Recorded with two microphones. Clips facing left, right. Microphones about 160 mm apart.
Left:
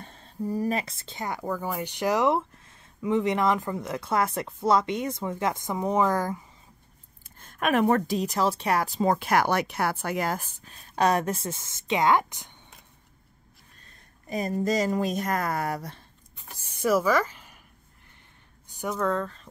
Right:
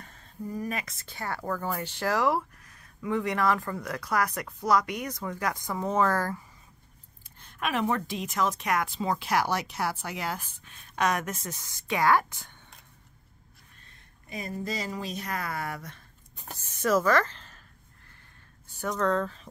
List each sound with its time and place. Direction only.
0.0 s speech: 30° left (ahead or behind)
7.3 s speech: 45° left (ahead or behind); by 12.5 s 20° left (ahead or behind)
13.8 s speech: 40° left (ahead or behind)
16.6 s a sound: 10° left (ahead or behind)
18.7 s speech: 10° left (ahead or behind)